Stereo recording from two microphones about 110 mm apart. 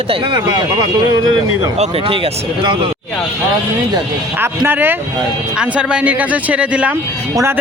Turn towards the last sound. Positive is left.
turn(degrees=-10)  # may be behind; listen again after turning